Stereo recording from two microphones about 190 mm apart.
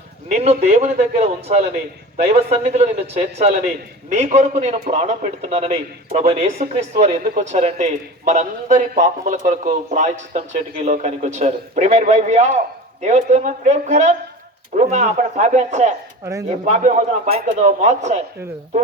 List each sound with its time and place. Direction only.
0.4 s a man's voice: 35° right (ahead or behind)
16.2 s speech: 15° right (ahead or behind)
16.5 s a man's voice: 35° right (ahead or behind)